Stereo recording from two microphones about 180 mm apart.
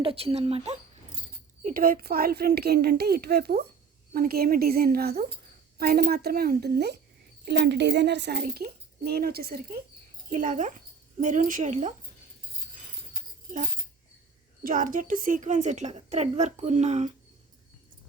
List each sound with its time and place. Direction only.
0.0 s a woman's voice: 30° right (ahead or behind)
1.6 s a woman's voice: 50° right (ahead or behind)
10.2 s speech: 50° right (ahead or behind)
14.6 s a woman's voice: 50° right (ahead or behind)